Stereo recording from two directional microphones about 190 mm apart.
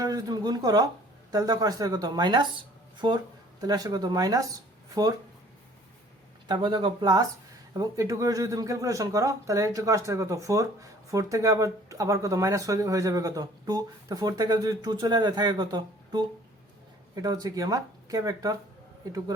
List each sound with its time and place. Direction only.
0.0 s speech: 20° right (ahead or behind)
6.5 s speech: 25° right (ahead or behind)